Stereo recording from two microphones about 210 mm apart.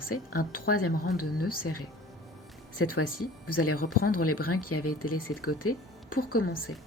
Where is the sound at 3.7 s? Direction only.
45° left (ahead or behind).